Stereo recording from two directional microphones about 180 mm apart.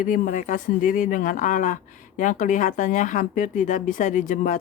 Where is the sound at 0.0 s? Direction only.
45° left (ahead or behind).